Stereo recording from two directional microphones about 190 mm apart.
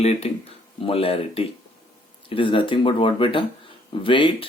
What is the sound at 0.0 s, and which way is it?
Speech, 35° left (ahead or behind).